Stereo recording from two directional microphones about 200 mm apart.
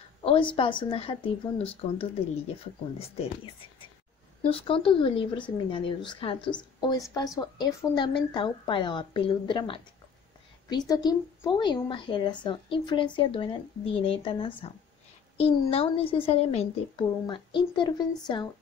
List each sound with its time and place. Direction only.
0.2 s a woman's voice: 25° left (ahead or behind)
4.5 s a woman's voice: 25° left (ahead or behind)